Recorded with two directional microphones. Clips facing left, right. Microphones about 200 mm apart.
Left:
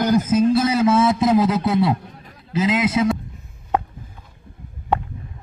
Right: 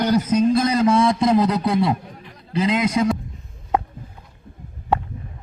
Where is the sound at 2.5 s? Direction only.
Centre (ahead or behind).